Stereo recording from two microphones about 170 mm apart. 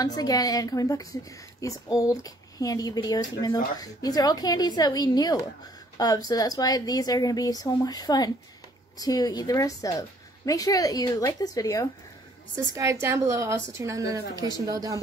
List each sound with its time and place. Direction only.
0.0 s a woman's voice: 25° left (ahead or behind)
12.7 s a woman's voice: 15° right (ahead or behind)